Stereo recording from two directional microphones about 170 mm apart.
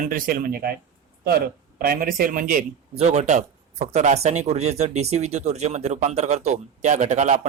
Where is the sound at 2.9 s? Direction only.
40° right (ahead or behind).